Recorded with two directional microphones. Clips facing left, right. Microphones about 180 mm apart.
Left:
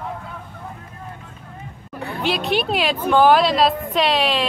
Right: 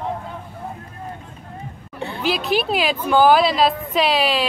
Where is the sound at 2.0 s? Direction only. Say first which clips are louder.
Even; 25° right (ahead or behind).